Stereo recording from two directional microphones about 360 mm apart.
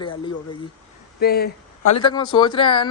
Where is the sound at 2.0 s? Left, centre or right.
Centre.